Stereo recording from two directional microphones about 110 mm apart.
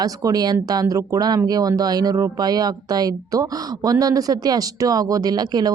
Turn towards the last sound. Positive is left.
turn(degrees=-40)  # may be behind; listen again after turning